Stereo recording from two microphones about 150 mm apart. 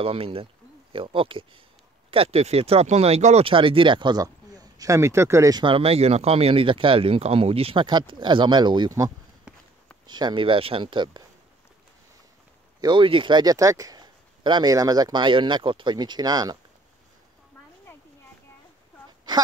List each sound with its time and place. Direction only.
0.0 s speech: 40° right (ahead or behind)
3.4 s speech: 35° right (ahead or behind)
12.8 s speech: 35° right (ahead or behind)